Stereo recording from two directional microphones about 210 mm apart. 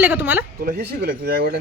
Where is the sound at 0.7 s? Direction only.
45° right (ahead or behind).